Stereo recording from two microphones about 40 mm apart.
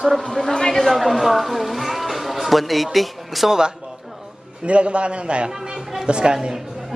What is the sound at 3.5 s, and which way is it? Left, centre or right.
Speech, centre.